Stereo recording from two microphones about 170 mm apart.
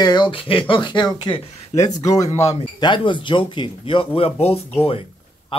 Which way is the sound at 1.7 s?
40° left (ahead or behind).